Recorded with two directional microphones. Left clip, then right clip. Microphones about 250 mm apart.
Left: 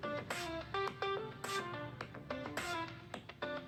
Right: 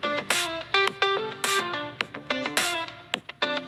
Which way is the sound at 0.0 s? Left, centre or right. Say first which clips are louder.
Right 15 dB; right.